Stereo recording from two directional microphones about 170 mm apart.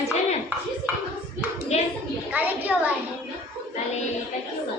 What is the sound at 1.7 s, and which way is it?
Speech, 40° left (ahead or behind).